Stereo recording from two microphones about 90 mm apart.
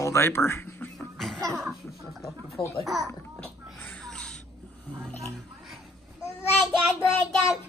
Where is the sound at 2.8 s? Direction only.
Centre (ahead or behind).